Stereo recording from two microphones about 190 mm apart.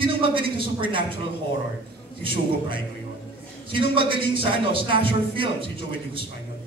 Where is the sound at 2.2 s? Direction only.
25° right (ahead or behind).